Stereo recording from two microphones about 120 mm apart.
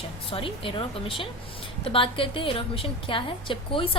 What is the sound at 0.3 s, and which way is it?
A woman's voice, 50° left (ahead or behind).